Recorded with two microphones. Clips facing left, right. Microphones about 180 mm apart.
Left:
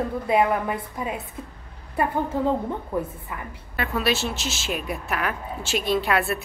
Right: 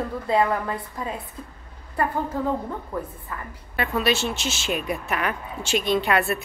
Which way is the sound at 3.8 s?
Centre (ahead or behind).